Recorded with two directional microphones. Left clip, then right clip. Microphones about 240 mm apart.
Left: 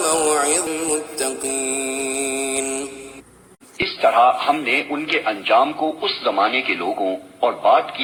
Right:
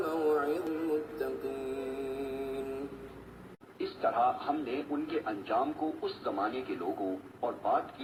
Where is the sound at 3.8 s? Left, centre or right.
Left.